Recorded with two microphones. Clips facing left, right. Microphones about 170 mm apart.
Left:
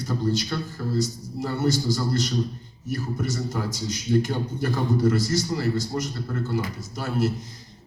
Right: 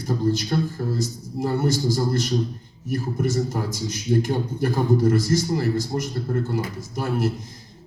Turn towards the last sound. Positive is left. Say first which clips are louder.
# right 1 dB
turn(degrees=-50)  # may be behind; listen again after turning